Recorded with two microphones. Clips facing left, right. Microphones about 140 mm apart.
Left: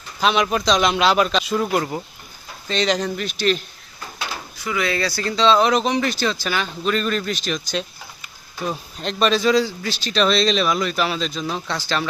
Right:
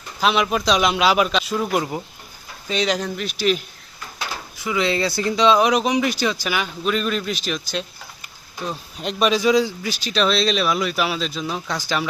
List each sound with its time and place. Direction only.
0.2 s speech: centre (ahead or behind)
4.6 s speech: 20° right (ahead or behind); by 7.9 s 5° right (ahead or behind)
9.0 s speech: 5° right (ahead or behind)